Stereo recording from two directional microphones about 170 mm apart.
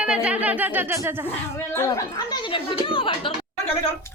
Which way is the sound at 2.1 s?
30° left (ahead or behind).